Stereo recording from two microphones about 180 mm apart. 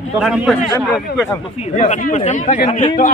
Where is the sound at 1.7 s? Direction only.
45° left (ahead or behind).